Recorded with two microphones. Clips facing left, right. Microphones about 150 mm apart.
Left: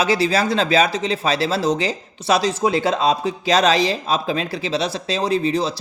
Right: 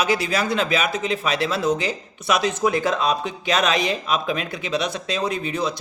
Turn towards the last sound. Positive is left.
turn(degrees=30)  # may be behind; listen again after turning